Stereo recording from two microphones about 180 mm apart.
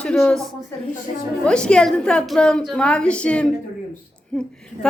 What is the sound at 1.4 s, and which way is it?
A woman's voice, 5° left (ahead or behind).